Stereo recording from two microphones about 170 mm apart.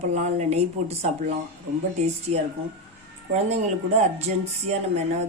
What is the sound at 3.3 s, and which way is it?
Speech, 40° right (ahead or behind).